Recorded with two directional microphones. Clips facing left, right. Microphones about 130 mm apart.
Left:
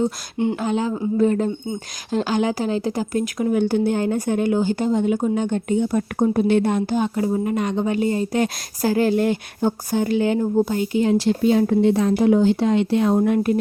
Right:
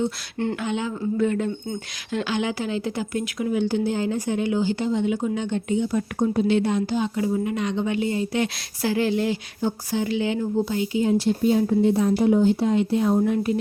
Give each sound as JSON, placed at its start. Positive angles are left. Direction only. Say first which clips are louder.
{"t": 0.5, "sound": "speech", "louder": "left 4 dB", "side_deg": 40}
{"t": 11.0, "sound": "speech", "louder": "left 2 dB", "side_deg": 85}